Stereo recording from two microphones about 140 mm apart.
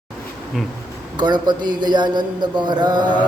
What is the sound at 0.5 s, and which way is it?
Insect, centre (ahead or behind).